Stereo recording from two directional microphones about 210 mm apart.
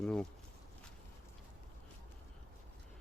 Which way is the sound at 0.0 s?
5° left (ahead or behind).